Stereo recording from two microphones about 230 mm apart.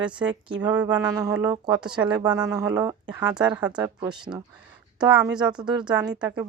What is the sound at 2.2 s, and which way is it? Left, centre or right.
Speech, centre.